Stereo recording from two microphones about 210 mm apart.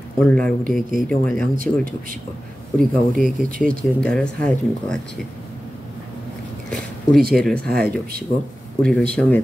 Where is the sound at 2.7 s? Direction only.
5° left (ahead or behind).